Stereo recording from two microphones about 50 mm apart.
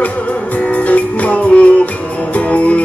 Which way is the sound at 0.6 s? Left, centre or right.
Left.